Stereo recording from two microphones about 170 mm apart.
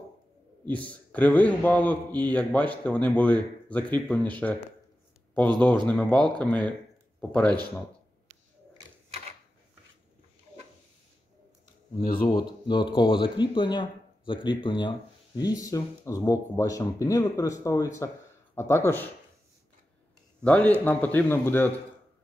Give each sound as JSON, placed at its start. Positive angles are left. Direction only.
{"t": 0.7, "sound": "a man's voice", "side_deg": 10}
{"t": 12.0, "sound": "speech", "side_deg": 60}
{"t": 12.3, "sound": "a man's voice", "side_deg": 25}
{"t": 20.4, "sound": "a man's voice", "side_deg": 5}